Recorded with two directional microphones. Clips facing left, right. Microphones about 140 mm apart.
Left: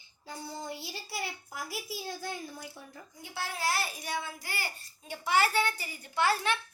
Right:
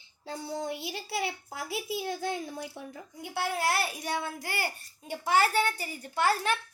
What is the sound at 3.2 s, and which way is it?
A child's voice, 60° right (ahead or behind).